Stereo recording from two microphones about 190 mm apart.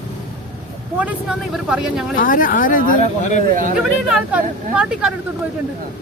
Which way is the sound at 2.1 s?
45° left (ahead or behind).